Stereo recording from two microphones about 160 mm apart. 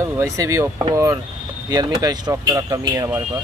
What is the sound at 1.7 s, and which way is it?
A man's voice, 25° right (ahead or behind).